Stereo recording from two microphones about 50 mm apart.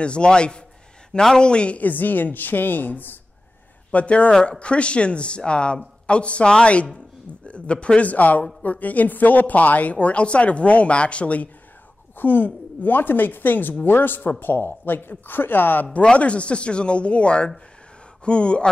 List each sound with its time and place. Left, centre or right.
0.0 s a woman's voice: centre
1.8 s speech: left
3.9 s a woman's voice: left
12.2 s speech: left
16.0 s a woman's voice: left